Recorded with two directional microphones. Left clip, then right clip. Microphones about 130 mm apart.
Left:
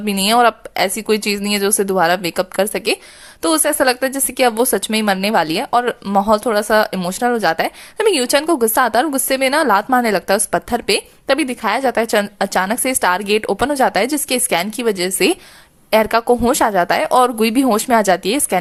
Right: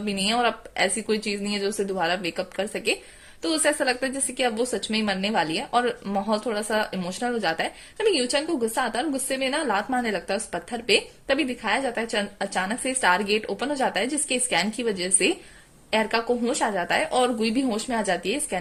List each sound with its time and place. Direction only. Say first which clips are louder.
0.0 s a woman's voice: left 10 dB; 35° left (ahead or behind)
17.1 s a woman's voice: left 9 dB; 45° left (ahead or behind)